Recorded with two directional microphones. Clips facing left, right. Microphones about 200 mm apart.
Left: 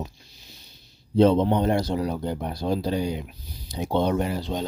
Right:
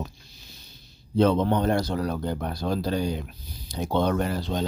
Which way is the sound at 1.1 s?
25° left (ahead or behind).